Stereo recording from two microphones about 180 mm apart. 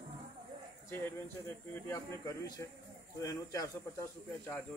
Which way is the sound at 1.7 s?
15° left (ahead or behind).